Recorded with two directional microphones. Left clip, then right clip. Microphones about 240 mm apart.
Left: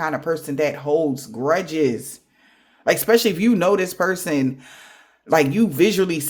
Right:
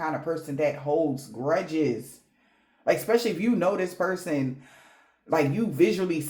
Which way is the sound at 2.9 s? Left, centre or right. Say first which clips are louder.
Left 7 dB; left.